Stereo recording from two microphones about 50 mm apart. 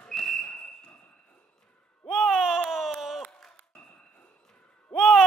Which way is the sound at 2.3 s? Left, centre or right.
Centre.